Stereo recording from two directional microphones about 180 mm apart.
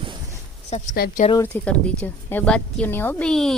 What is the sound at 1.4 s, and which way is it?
Speech, 5° left (ahead or behind).